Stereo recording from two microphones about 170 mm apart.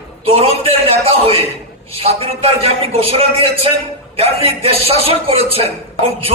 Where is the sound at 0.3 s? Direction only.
35° right (ahead or behind).